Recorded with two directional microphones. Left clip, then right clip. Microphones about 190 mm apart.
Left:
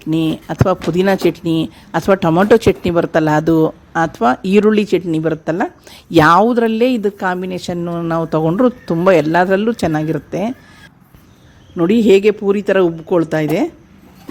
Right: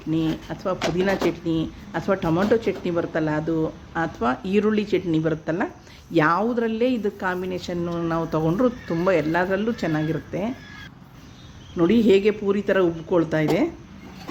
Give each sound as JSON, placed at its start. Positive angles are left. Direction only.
{"t": 0.1, "sound": "speech", "side_deg": 55}
{"t": 11.8, "sound": "speech", "side_deg": 40}